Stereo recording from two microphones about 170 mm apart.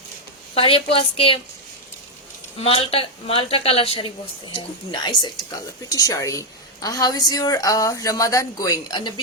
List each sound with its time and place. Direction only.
0.5 s a woman's voice: 30° left (ahead or behind)
2.6 s a woman's voice: 35° left (ahead or behind)